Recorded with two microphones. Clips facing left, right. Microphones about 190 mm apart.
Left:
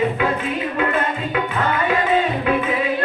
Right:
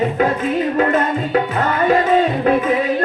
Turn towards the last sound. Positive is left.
turn(degrees=-40)  # may be behind; listen again after turning